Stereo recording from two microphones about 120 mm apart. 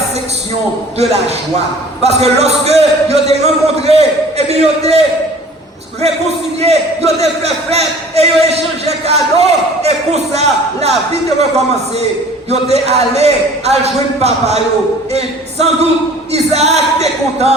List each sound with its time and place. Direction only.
0.9 s a man's voice: 65° right (ahead or behind)
6.2 s a man's voice: 60° right (ahead or behind)
12.5 s a man's voice: 65° right (ahead or behind)